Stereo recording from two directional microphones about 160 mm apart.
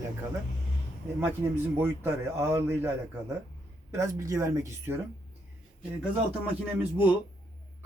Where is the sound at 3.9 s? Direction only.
20° right (ahead or behind).